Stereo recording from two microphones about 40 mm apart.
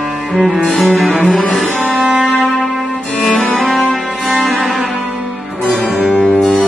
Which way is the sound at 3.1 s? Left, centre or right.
Left.